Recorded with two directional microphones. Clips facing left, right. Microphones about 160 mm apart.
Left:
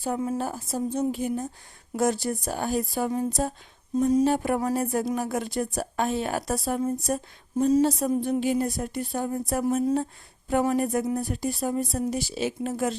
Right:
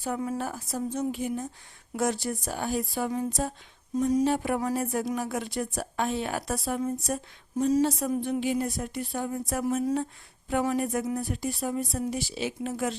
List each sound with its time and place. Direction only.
0.0 s speech: 30° left (ahead or behind)
3.9 s speech: 25° left (ahead or behind)
4.2 s speech: 45° left (ahead or behind)